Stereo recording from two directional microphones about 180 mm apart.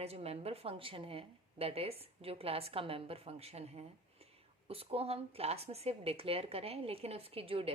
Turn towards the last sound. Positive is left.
turn(degrees=-30)  # may be behind; listen again after turning